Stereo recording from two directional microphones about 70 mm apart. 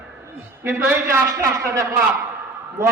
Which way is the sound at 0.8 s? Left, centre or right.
Right.